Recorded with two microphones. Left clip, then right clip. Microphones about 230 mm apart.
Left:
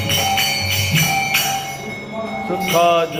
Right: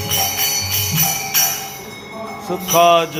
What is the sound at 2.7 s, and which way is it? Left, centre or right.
Jingle bell, right.